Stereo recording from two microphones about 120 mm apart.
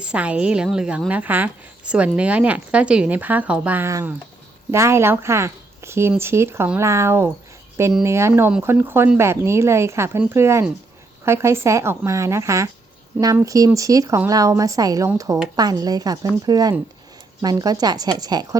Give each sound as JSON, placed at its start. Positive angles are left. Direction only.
{"t": 0.0, "sound": "a woman's voice", "side_deg": -10}